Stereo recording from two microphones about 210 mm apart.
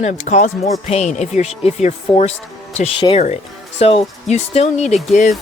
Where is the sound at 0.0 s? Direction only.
35° left (ahead or behind).